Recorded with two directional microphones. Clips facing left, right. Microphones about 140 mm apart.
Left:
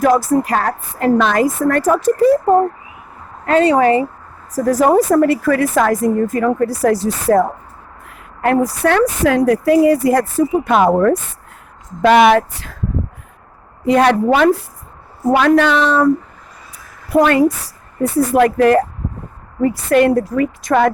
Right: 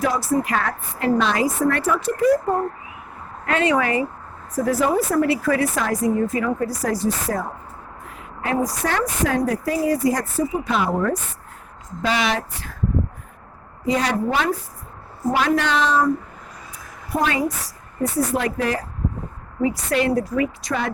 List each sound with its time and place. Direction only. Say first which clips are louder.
0.0 s speech: left 9 dB; 50° left (ahead or behind)
0.4 s a woman's voice: left 6 dB; 40° left (ahead or behind); by 12.7 s 70° left (ahead or behind)
13.8 s speech: left 9 dB; 65° left (ahead or behind)
17.1 s a woman's voice: left 10 dB; 70° left (ahead or behind); by 20.9 s 55° left (ahead or behind)